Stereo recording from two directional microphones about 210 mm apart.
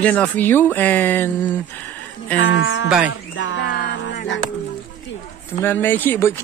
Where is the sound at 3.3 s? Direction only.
60° left (ahead or behind).